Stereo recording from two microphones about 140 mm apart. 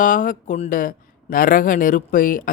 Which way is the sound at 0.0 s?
70° left (ahead or behind).